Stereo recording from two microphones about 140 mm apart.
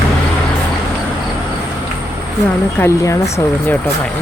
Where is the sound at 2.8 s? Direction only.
20° left (ahead or behind).